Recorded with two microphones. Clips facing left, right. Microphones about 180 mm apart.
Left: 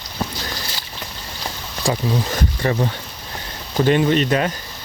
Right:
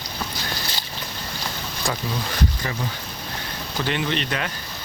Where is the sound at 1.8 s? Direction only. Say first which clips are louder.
Left 6 dB; 35° left (ahead or behind).